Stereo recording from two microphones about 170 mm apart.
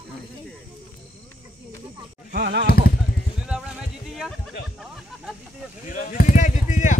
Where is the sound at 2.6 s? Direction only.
60° left (ahead or behind).